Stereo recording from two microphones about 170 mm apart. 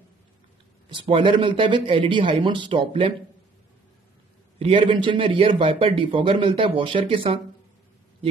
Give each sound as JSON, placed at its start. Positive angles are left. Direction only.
{"t": 1.1, "sound": "speech", "side_deg": -30}
{"t": 4.6, "sound": "speech", "side_deg": -30}